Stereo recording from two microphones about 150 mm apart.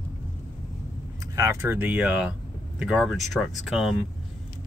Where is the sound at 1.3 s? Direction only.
20° right (ahead or behind).